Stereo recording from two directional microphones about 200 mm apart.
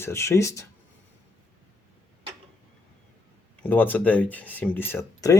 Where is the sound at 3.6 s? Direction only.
10° left (ahead or behind).